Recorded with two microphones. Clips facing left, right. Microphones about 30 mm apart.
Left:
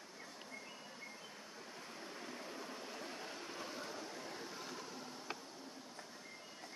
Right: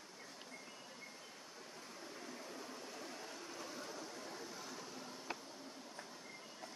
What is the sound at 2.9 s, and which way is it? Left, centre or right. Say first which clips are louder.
Vehicle: left 2 dB; left.